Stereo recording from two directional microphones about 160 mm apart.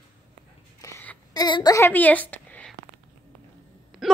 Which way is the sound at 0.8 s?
15° left (ahead or behind).